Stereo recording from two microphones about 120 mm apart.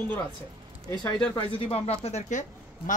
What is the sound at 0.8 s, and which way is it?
Speech, 30° left (ahead or behind).